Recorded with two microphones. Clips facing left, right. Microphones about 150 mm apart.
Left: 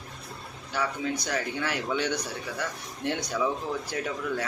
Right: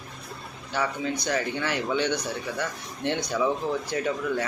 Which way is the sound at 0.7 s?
Centre (ahead or behind).